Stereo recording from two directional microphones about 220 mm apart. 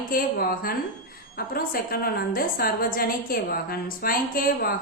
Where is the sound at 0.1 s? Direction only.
40° left (ahead or behind).